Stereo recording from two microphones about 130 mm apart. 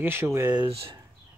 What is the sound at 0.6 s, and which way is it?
Speech, 45° right (ahead or behind).